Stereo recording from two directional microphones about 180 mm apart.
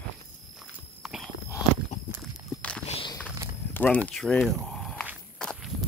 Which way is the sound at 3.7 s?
10° left (ahead or behind).